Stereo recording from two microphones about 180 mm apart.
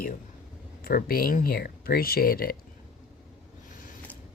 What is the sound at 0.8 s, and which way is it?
Speech, 55° left (ahead or behind).